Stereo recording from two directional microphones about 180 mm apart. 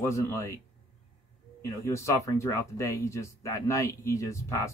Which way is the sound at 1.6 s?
15° left (ahead or behind).